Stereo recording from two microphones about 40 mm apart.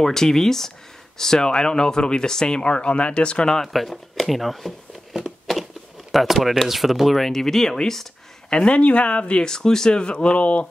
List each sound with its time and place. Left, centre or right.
0.0 s speech: centre
3.7 s speech: centre
8.5 s speech: left
9.4 s speech: centre